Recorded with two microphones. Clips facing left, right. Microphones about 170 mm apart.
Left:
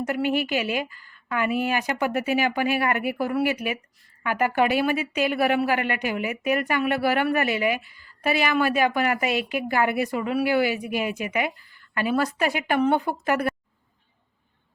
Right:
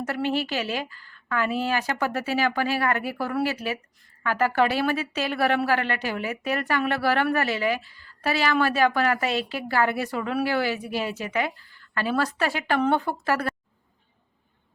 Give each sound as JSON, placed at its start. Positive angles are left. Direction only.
{"t": 0.0, "sound": "a woman's voice", "side_deg": 15}